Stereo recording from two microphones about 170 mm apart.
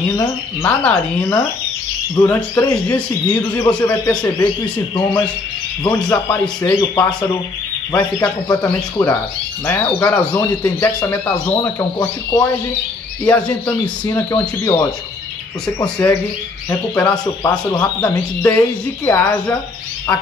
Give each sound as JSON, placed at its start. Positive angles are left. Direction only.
{"t": 0.2, "sound": "a man's voice", "side_deg": 15}
{"t": 5.9, "sound": "speech", "side_deg": 15}
{"t": 14.0, "sound": "a man's voice", "side_deg": 20}